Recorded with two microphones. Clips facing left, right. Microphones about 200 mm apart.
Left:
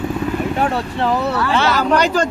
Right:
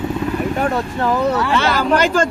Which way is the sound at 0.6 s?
45° right (ahead or behind).